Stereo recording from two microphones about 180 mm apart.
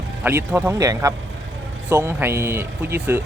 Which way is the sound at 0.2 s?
15° right (ahead or behind).